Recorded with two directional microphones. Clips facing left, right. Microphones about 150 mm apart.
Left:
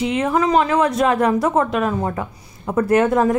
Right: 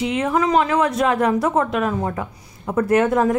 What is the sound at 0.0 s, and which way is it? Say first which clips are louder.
Speech: left 1 dB; 35° left (ahead or behind).